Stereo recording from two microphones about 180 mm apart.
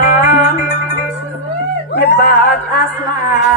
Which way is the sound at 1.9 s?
65° left (ahead or behind).